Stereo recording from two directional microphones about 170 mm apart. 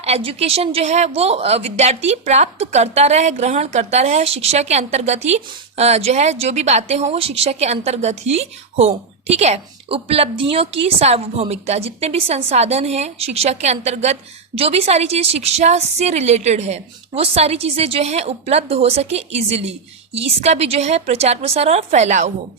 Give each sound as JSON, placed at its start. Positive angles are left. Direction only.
{"t": 0.0, "sound": "a woman's voice", "side_deg": -35}